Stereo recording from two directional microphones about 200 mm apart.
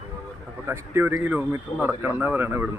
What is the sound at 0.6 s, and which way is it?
A man's voice, 10° right (ahead or behind).